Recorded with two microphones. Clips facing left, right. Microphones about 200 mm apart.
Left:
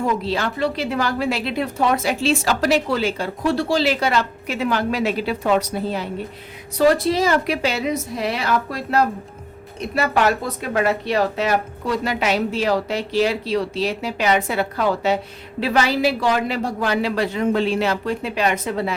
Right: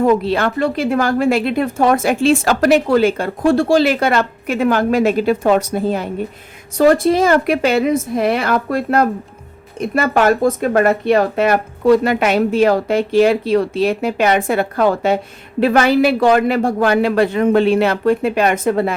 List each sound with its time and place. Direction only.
0.0 s a woman's voice: 60° right (ahead or behind)